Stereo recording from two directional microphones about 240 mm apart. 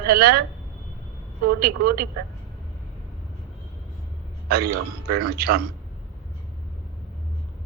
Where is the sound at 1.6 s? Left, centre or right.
Right.